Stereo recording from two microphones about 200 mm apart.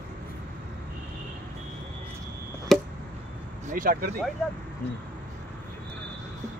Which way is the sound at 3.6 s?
40° right (ahead or behind).